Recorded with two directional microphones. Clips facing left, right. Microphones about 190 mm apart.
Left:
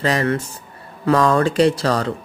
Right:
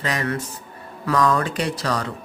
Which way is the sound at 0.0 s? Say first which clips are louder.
Left 6 dB; 30° left (ahead or behind).